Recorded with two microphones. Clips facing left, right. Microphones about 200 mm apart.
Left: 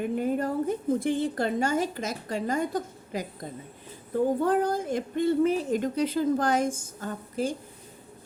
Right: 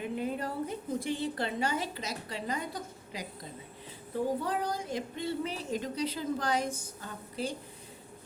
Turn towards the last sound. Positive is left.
turn(degrees=45)  # may be behind; listen again after turning